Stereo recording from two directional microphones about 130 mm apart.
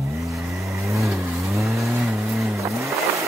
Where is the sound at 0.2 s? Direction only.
Centre (ahead or behind).